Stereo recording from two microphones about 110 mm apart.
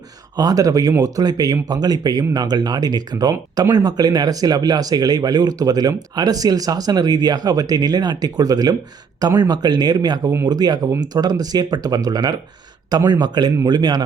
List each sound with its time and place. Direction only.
0.3 s speech: 35° right (ahead or behind)